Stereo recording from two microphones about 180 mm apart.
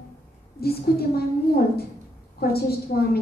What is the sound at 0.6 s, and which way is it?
Speech, 60° left (ahead or behind).